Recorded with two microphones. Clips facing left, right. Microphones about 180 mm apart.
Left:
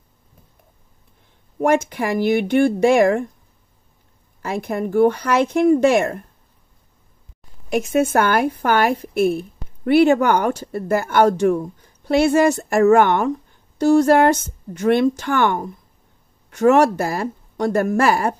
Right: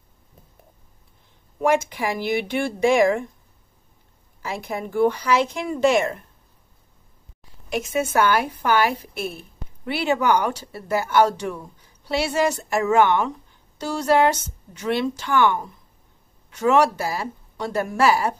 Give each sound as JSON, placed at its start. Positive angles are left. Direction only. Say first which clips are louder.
{"t": 1.6, "sound": "speech", "louder": "left 3 dB", "side_deg": 55}
{"t": 4.4, "sound": "speech", "louder": "left 6 dB", "side_deg": 55}
{"t": 7.7, "sound": "speech", "louder": "left 5 dB", "side_deg": 50}